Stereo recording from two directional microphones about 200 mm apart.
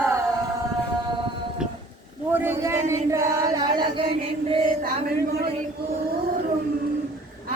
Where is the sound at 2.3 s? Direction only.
10° right (ahead or behind).